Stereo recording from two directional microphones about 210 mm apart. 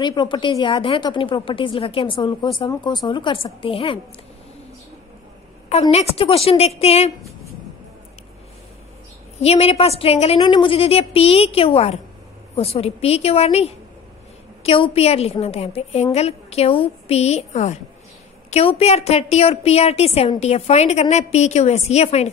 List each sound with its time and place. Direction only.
0.0 s speech: 20° left (ahead or behind)
5.7 s speech: 30° left (ahead or behind)
9.4 s a woman's voice: 30° left (ahead or behind)